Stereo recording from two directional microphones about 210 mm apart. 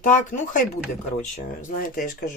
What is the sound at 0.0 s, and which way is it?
Speech, 40° left (ahead or behind).